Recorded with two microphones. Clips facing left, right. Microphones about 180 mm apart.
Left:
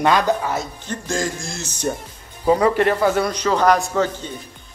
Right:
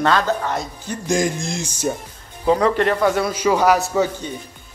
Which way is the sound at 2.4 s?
5° left (ahead or behind).